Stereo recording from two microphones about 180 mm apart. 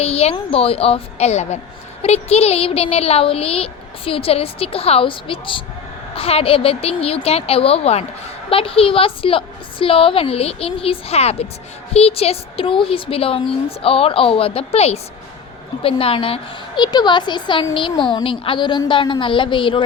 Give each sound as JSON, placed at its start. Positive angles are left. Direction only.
{"t": 0.0, "sound": "a woman's voice", "side_deg": 35}